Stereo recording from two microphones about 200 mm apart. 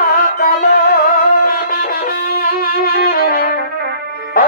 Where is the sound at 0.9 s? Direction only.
50° left (ahead or behind).